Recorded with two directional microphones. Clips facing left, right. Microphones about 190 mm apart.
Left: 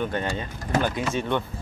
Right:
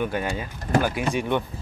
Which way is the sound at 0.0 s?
10° right (ahead or behind).